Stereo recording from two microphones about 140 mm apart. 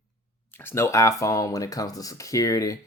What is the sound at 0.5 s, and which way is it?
Speech, 15° left (ahead or behind).